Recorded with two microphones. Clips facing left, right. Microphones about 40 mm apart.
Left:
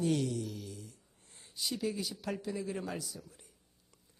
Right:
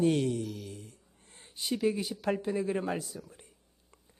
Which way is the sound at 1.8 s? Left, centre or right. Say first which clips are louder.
Right 9 dB; right.